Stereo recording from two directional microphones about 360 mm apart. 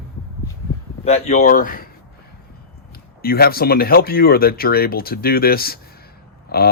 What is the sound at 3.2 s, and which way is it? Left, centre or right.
Speech, left.